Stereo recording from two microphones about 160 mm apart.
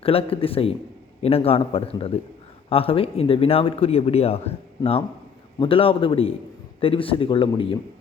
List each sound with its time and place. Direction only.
0.0 s speech: 35° left (ahead or behind)